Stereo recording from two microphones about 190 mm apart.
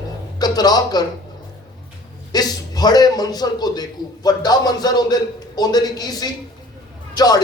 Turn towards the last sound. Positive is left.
turn(degrees=20)  # may be behind; listen again after turning